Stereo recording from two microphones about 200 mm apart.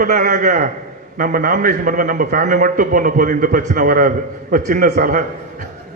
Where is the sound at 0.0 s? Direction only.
40° right (ahead or behind).